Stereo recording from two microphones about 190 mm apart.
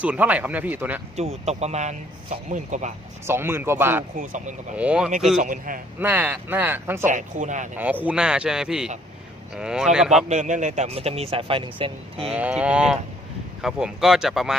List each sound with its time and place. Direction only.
0.0 s speech: 10° right (ahead or behind)
1.1 s speech: 35° right (ahead or behind)
3.2 s speech: 10° right (ahead or behind)
4.2 s speech: 40° right (ahead or behind)
4.8 s speech: 5° right (ahead or behind)
5.4 s a man's voice: 45° right (ahead or behind)
6.0 s speech: 10° right (ahead or behind)
7.1 s speech: 40° right (ahead or behind)
7.8 s speech: 10° right (ahead or behind)
10.2 s speech: 40° right (ahead or behind)
12.3 s speech: 5° right (ahead or behind)